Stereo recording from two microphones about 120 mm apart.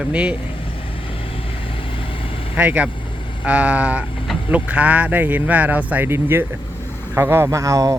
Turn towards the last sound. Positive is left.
turn(degrees=-25)  # may be behind; listen again after turning